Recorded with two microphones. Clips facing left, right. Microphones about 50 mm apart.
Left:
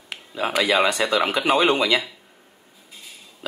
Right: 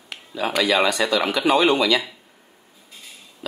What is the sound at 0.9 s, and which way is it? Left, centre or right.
Speech, centre.